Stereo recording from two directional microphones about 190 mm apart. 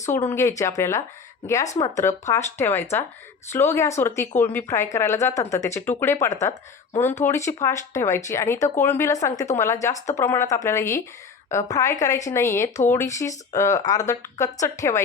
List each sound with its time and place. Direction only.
0.1 s speech: 15° left (ahead or behind)